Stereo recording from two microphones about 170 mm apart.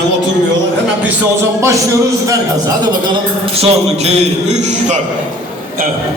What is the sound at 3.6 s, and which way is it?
A man's voice, 40° right (ahead or behind).